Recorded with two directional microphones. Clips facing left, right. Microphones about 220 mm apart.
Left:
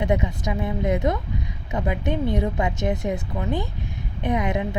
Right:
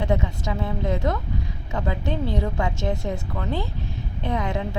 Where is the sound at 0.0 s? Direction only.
15° left (ahead or behind).